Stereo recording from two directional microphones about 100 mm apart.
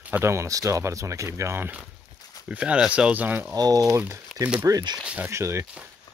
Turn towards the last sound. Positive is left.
turn(degrees=-30)  # may be behind; listen again after turning